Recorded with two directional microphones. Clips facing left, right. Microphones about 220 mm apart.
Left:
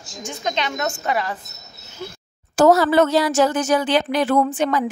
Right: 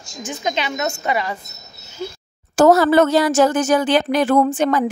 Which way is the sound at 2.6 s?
50° right (ahead or behind).